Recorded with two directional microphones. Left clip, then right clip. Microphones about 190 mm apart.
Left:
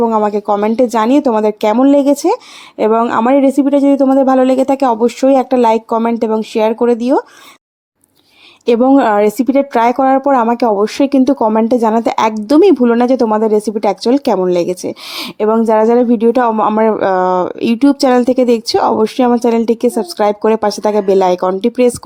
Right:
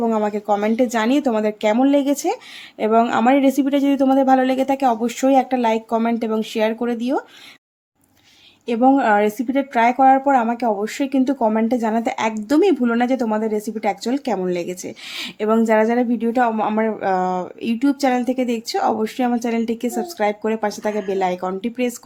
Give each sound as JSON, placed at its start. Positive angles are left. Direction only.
{"t": 0.0, "sound": "speech", "side_deg": 20}
{"t": 8.6, "sound": "a woman's voice", "side_deg": 35}
{"t": 15.4, "sound": "a woman's voice", "side_deg": 20}